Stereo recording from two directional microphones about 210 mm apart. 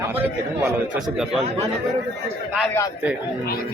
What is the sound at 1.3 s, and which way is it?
Speech, 30° right (ahead or behind).